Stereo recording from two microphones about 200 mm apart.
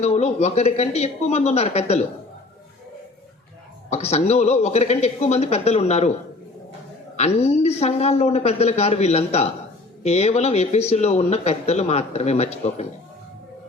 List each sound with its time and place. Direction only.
0.0 s speech: 30° left (ahead or behind)
3.8 s speech: 30° left (ahead or behind)
7.2 s speech: 30° left (ahead or behind)